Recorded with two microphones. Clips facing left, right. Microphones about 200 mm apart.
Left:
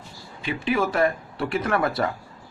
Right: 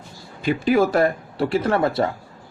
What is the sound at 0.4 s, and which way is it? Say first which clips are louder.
Speech: right 6 dB; 40° right (ahead or behind).